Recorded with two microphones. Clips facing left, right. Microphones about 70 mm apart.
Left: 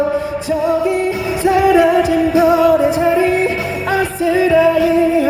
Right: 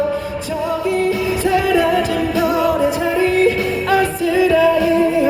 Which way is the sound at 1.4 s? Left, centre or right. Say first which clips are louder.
Left 6 dB; centre.